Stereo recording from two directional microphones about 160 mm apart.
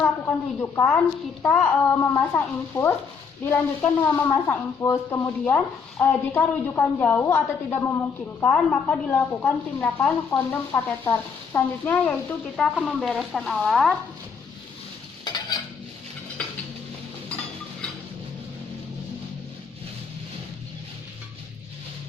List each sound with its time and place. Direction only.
0.0 s a woman's voice: 15° left (ahead or behind)
15.2 s stir: 25° left (ahead or behind)